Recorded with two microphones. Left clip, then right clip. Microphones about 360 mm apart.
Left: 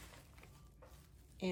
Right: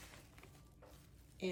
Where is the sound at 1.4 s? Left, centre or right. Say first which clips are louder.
Left 1 dB; centre.